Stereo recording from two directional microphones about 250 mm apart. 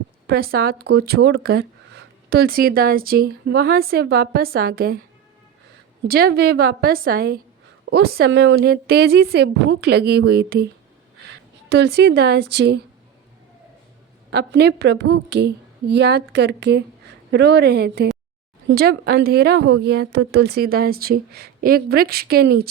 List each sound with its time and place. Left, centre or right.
0.3 s speech: right
6.1 s speech: right
14.3 s speech: right